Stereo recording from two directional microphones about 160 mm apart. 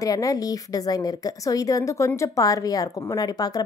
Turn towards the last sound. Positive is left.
turn(degrees=25)  # may be behind; listen again after turning